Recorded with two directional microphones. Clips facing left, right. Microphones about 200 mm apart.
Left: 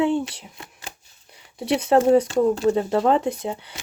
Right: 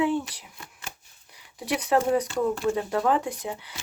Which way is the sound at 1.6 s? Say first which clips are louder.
Left 6 dB; 25° left (ahead or behind).